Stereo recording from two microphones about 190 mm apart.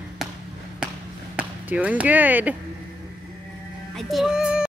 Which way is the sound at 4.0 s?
Centre (ahead or behind).